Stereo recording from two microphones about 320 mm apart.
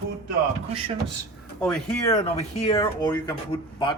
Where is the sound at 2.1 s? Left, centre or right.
Centre.